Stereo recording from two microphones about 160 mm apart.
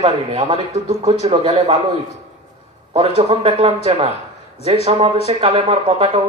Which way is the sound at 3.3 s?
40° right (ahead or behind).